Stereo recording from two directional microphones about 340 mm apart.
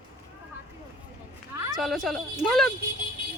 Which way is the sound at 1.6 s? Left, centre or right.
Centre.